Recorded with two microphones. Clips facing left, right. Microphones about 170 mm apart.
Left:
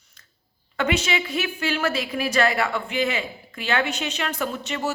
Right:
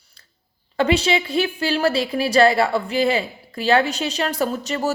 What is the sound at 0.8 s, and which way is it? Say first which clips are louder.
Speech: right 5 dB; 30° right (ahead or behind).